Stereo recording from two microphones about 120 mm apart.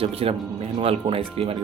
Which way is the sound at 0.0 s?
55° right (ahead or behind).